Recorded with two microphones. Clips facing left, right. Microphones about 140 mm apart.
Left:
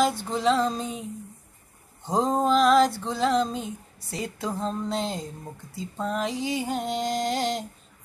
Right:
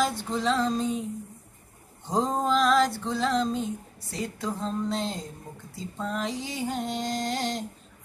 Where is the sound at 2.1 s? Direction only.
10° left (ahead or behind).